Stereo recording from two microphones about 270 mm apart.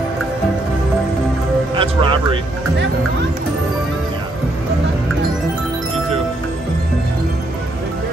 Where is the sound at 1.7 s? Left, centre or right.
Centre.